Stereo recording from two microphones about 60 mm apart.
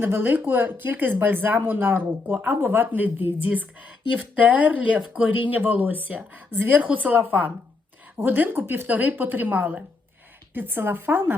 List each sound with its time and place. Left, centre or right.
0.0 s speech: right
3.5 s speech: right